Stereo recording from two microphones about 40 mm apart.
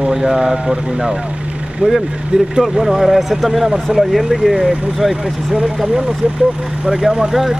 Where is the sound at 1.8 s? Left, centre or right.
Right.